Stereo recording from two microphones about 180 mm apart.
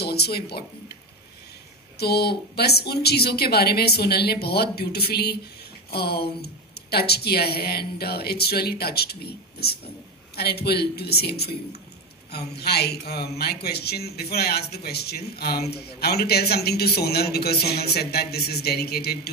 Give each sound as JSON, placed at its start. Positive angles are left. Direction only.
{"t": 0.0, "sound": "speech", "side_deg": 65}
{"t": 2.0, "sound": "speech", "side_deg": 60}